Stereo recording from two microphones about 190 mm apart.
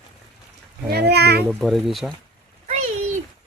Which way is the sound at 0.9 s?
60° right (ahead or behind).